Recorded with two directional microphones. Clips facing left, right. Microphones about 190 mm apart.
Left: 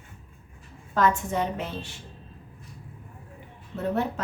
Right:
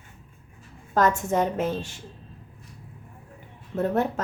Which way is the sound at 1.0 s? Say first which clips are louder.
Right 2 dB; 45° right (ahead or behind).